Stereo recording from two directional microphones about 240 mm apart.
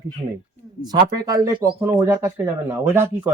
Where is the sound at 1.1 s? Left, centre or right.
Centre.